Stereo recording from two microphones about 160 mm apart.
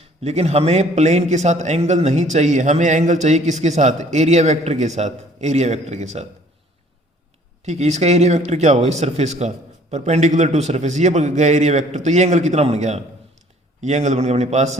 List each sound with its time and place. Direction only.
0.0 s a man's voice: 40° right (ahead or behind)
7.6 s a man's voice: 45° right (ahead or behind)